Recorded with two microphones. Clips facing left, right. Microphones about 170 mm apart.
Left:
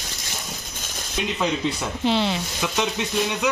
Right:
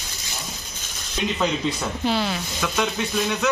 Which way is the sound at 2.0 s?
20° left (ahead or behind).